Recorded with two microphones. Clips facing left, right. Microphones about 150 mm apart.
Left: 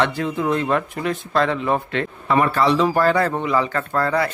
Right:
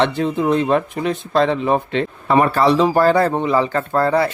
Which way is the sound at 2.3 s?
35° right (ahead or behind).